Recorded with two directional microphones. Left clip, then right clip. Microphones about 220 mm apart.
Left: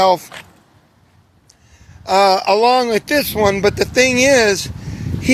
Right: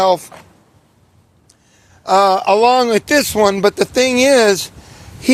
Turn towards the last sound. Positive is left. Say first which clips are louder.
# right 1 dB
turn(degrees=-15)  # may be behind; listen again after turning